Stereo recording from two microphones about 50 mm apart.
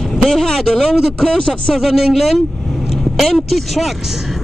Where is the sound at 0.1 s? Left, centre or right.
Centre.